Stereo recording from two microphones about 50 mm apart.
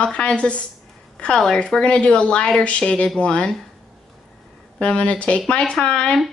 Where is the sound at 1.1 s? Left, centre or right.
Centre.